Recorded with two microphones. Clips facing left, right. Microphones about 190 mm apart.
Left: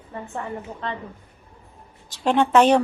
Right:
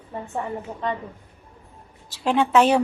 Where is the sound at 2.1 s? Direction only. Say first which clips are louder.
Left 1 dB; 5° right (ahead or behind).